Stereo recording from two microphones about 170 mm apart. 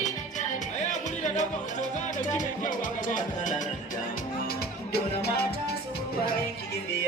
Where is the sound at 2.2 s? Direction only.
50° left (ahead or behind).